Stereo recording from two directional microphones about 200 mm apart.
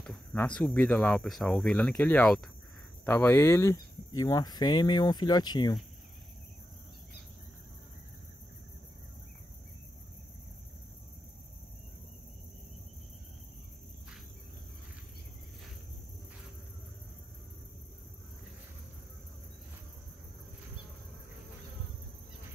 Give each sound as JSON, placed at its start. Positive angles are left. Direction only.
{"t": 0.0, "sound": "speech", "side_deg": 5}